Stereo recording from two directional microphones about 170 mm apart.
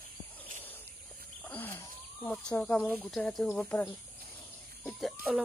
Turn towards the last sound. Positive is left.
turn(degrees=-10)  # may be behind; listen again after turning